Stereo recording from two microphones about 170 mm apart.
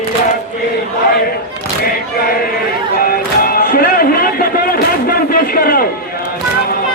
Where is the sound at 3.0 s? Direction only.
60° left (ahead or behind).